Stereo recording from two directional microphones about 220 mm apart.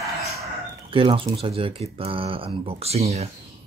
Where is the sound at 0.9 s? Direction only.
25° right (ahead or behind).